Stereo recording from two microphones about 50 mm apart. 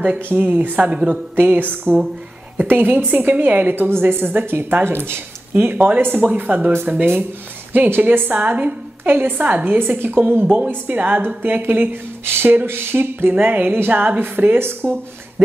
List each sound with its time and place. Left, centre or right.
0.3 s a woman's voice: right
7.7 s a woman's voice: right
9.0 s a woman's voice: right
9.4 s a woman's voice: right
13.3 s a woman's voice: right
14.8 s speech: right